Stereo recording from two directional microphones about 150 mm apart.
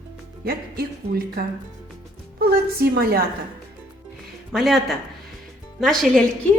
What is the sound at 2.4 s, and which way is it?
Speech, 90° right.